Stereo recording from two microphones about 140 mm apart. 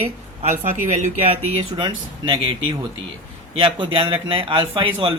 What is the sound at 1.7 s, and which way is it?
Speech, 35° right (ahead or behind).